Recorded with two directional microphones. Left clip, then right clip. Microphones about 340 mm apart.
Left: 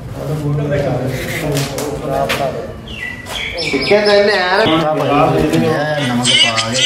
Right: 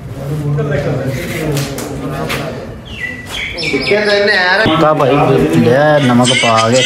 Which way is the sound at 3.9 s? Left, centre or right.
Centre.